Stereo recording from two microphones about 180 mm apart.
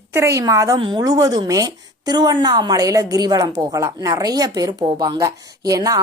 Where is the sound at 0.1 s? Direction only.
15° right (ahead or behind).